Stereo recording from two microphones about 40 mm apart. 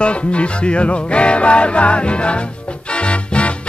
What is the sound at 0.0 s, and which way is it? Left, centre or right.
Music, left.